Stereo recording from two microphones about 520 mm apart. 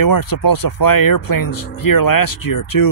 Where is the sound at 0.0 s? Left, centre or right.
Left.